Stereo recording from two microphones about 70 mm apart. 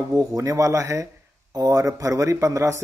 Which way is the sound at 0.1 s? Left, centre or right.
Right.